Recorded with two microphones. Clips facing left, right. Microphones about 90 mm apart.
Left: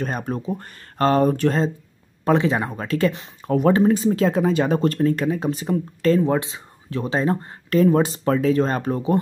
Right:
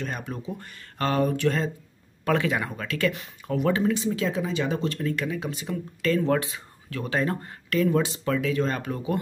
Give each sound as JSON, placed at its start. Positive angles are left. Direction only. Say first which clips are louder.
{"t": 0.0, "sound": "speech", "louder": "left 7 dB", "side_deg": 40}
{"t": 6.2, "sound": "speech", "louder": "left 3 dB", "side_deg": 20}